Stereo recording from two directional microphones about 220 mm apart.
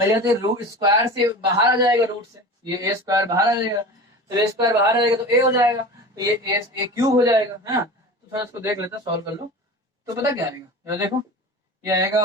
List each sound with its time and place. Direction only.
0.1 s speech: 15° right (ahead or behind)